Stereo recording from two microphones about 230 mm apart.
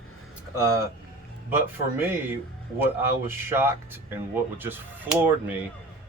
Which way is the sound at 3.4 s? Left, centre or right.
Centre.